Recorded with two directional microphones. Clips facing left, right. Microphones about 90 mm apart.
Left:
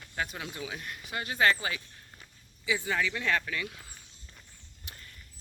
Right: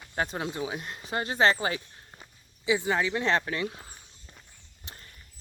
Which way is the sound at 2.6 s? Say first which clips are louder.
Right 4 dB; 20° right (ahead or behind).